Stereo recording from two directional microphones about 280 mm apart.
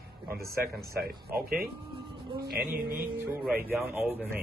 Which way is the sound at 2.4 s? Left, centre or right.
Right.